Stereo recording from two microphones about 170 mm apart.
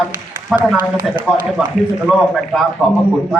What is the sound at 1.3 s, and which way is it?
A woman's voice, 5° right (ahead or behind).